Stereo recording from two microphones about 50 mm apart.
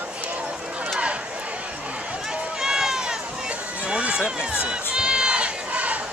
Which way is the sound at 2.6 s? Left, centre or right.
Centre.